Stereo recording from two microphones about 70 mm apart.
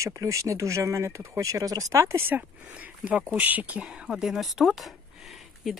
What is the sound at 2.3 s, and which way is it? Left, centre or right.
Speech, centre.